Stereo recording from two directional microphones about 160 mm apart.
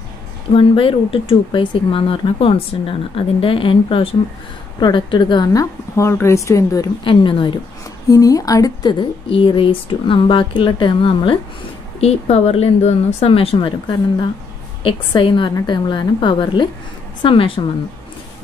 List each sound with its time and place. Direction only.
0.6 s a woman's voice: 35° left (ahead or behind)
7.1 s speech: 30° left (ahead or behind)
14.8 s a woman's voice: 30° left (ahead or behind)